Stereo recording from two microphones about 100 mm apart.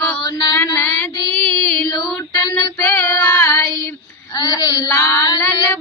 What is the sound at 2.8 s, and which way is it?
Child singing, 25° left (ahead or behind).